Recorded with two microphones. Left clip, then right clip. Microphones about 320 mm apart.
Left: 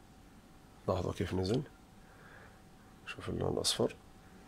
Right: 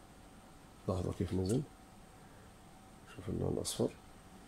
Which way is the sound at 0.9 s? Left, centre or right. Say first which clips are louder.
Left 5 dB; left.